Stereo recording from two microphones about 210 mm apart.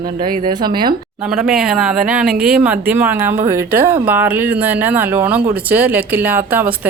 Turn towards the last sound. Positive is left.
turn(degrees=-10)  # may be behind; listen again after turning